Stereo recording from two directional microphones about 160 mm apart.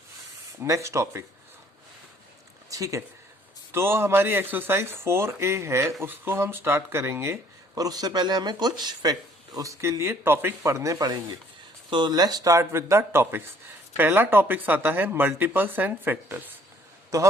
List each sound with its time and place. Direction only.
0.6 s speech: 20° right (ahead or behind)
2.6 s a sound: 20° right (ahead or behind)
3.7 s speech: 15° right (ahead or behind)